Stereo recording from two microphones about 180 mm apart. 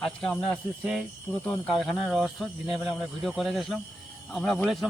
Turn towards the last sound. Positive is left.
turn(degrees=0)  # may be behind; listen again after turning